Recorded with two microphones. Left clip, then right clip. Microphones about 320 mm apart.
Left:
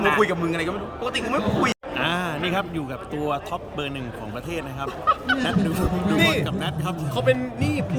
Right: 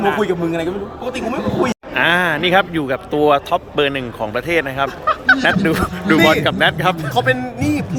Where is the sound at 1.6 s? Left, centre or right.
Centre.